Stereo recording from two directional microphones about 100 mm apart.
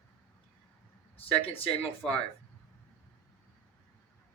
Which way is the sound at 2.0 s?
5° left (ahead or behind).